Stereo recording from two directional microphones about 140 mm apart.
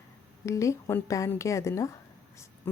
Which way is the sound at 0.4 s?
20° left (ahead or behind).